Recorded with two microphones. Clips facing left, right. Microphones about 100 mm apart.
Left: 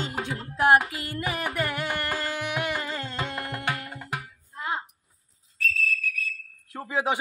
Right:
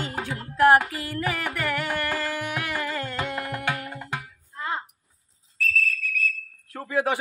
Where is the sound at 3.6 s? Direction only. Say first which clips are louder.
Right 2 dB; 15° right (ahead or behind).